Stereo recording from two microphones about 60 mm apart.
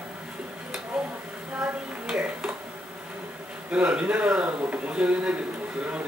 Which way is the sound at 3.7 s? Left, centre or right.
Centre.